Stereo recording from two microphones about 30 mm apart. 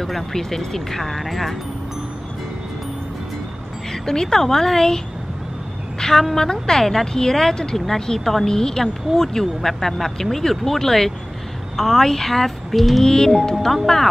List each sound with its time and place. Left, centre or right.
0.0 s speech: centre
3.9 s a woman's voice: centre
8.5 s speech: centre
13.0 s speech: centre